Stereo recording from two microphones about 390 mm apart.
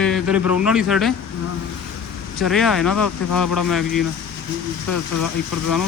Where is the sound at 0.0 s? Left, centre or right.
Centre.